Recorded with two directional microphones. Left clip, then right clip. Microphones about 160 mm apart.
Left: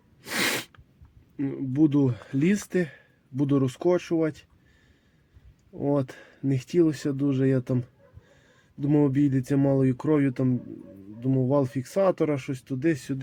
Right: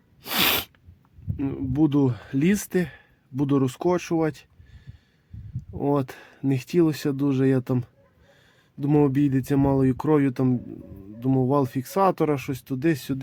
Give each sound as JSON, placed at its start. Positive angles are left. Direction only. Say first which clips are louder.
{"t": 1.4, "sound": "speech", "louder": "even", "side_deg": -30}
{"t": 5.8, "sound": "speech", "louder": "right 2 dB", "side_deg": -40}
{"t": 8.8, "sound": "speech", "louder": "right 2 dB", "side_deg": -35}